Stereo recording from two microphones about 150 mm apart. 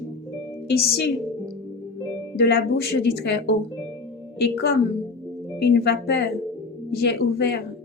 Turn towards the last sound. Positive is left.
turn(degrees=90)